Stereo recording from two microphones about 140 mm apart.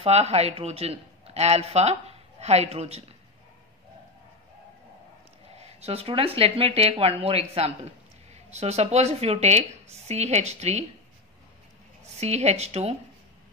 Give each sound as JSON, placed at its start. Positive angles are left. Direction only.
{"t": 0.0, "sound": "speech", "side_deg": -45}
{"t": 5.6, "sound": "a woman's voice", "side_deg": -45}
{"t": 12.2, "sound": "a woman's voice", "side_deg": -50}